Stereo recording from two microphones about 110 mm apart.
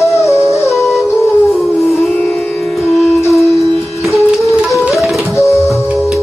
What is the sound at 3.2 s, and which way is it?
Music, 25° left (ahead or behind).